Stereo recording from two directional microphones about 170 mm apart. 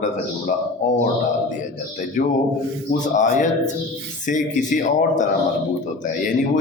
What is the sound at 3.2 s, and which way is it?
A man's voice, 45° left (ahead or behind).